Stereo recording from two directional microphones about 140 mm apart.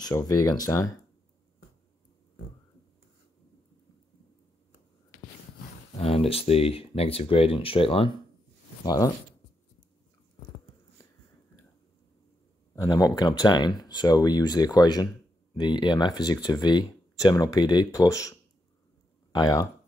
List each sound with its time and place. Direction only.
0.0 s speech: 25° left (ahead or behind)
5.9 s speech: 40° left (ahead or behind)
8.8 s speech: 25° left (ahead or behind)
12.7 s speech: 25° left (ahead or behind)